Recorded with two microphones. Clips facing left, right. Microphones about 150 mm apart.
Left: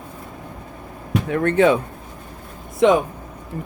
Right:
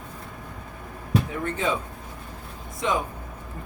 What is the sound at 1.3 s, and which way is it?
Speech, 70° left (ahead or behind).